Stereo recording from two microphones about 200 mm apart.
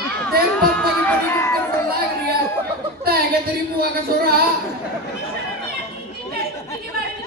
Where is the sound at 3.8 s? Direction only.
50° right (ahead or behind).